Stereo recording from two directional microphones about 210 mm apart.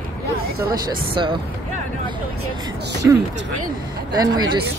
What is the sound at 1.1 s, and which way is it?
Speech, 25° right (ahead or behind).